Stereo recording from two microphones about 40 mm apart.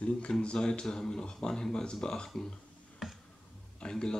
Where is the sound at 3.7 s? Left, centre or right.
Left.